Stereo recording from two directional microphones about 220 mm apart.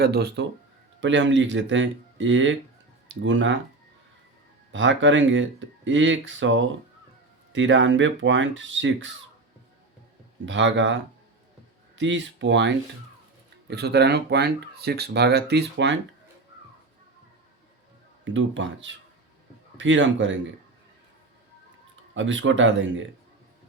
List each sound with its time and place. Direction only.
0.0 s speech: 45° right (ahead or behind)
4.7 s speech: 60° right (ahead or behind)
10.4 s speech: 55° right (ahead or behind)
18.3 s speech: 55° right (ahead or behind)
22.1 s speech: 60° right (ahead or behind)